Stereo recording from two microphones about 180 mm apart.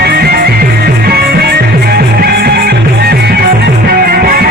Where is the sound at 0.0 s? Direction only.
60° right (ahead or behind).